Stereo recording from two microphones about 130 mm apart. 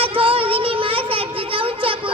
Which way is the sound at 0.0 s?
45° right (ahead or behind).